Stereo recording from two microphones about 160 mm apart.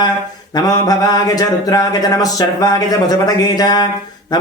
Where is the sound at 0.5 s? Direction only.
25° left (ahead or behind).